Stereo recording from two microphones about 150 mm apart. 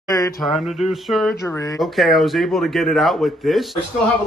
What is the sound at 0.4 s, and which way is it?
Speech, centre (ahead or behind).